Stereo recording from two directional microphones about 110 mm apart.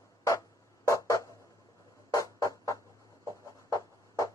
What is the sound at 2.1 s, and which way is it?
Music, 30° left (ahead or behind).